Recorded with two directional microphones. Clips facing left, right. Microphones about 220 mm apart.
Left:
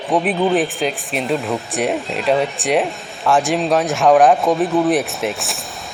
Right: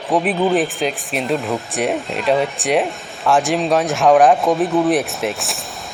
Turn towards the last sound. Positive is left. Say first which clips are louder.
# even
turn(degrees=0)  # may be behind; listen again after turning